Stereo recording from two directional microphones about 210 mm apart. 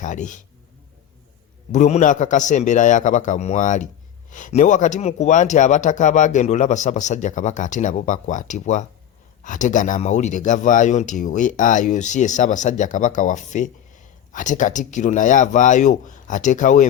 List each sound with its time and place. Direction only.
0.0 s speech: 35° left (ahead or behind)
1.7 s speech: 35° left (ahead or behind)